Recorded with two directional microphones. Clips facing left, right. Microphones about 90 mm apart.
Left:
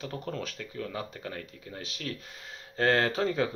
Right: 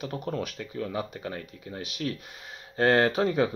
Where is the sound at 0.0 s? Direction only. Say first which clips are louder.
Right 4 dB; 15° right (ahead or behind).